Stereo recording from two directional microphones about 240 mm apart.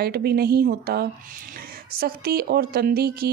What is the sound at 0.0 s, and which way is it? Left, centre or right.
Speech, right.